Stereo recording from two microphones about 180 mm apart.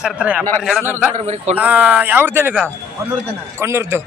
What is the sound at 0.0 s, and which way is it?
Speech, 5° right (ahead or behind).